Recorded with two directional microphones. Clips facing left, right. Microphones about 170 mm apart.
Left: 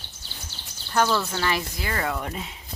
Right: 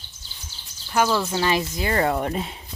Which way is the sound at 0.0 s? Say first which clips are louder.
Left 4 dB; 70° left (ahead or behind).